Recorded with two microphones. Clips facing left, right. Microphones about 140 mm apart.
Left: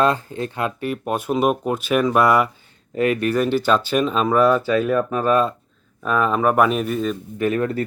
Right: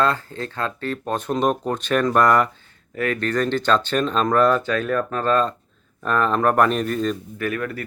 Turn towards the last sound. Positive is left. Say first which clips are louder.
# left 6 dB
turn(degrees=25)  # may be behind; listen again after turning